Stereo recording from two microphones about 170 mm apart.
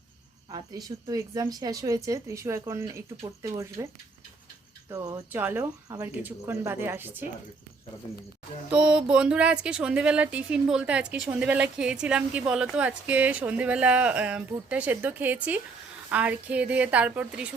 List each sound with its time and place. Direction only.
0.5 s cricket: 20° right (ahead or behind)
0.9 s speech: 20° right (ahead or behind)
4.9 s speech: 20° right (ahead or behind)
8.7 s speech: 5° right (ahead or behind)